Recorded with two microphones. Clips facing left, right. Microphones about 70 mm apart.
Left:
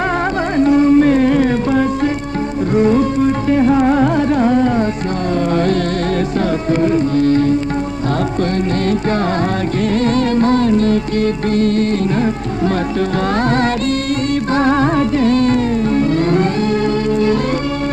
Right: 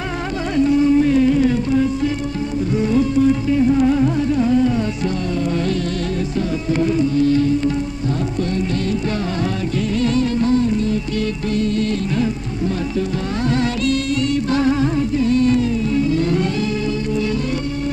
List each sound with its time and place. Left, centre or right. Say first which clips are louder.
0.6 s carnatic music: left 4 dB; left
2.7 s music: left 4 dB; left
6.7 s music: left 2 dB; left
9.9 s music: left 3 dB; left
11.1 s music: left 5 dB; left
13.5 s music: left 3 dB; left